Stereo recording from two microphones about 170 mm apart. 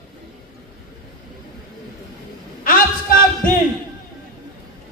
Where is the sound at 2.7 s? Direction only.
55° left (ahead or behind).